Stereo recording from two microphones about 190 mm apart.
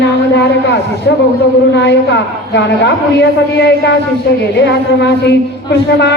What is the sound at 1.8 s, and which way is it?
Speech, 65° left (ahead or behind).